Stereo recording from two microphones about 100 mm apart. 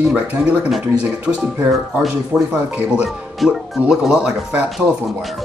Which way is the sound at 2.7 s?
15° right (ahead or behind).